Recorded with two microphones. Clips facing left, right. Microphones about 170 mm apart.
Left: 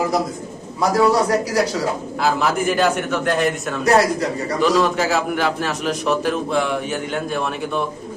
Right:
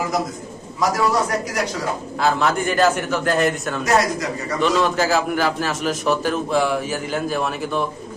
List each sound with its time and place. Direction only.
0.9 s a man's voice: 35° left (ahead or behind)
2.2 s a man's voice: centre (ahead or behind)
3.8 s a man's voice: 30° left (ahead or behind)
4.6 s a man's voice: centre (ahead or behind)